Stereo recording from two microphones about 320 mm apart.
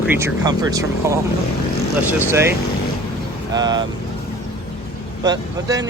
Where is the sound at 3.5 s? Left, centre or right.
Centre.